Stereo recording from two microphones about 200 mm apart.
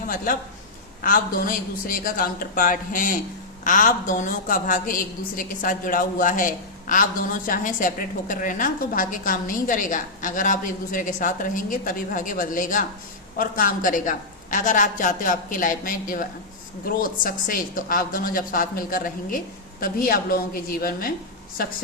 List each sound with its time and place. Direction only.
1.0 s a woman's voice: 45° left (ahead or behind)